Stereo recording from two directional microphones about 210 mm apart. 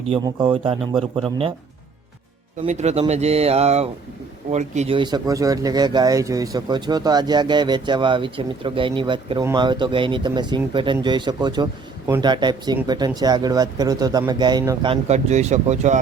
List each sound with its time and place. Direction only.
0.1 s speech: 20° right (ahead or behind)
2.6 s speech: 30° right (ahead or behind)